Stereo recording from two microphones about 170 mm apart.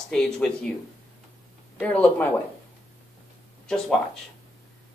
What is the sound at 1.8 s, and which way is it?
Speech, 10° left (ahead or behind).